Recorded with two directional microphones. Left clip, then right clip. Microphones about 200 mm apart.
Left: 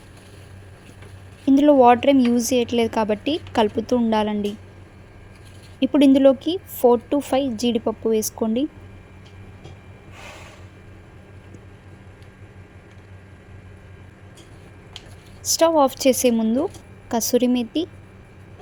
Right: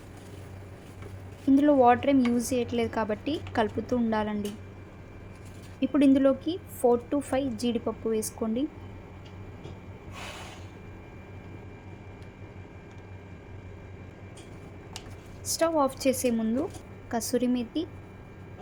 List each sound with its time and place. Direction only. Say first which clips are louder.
1.5 s a woman's voice: left 7 dB; 30° left (ahead or behind)
5.8 s a woman's voice: left 8 dB; 35° left (ahead or behind)
15.4 s a woman's voice: left 9 dB; 30° left (ahead or behind)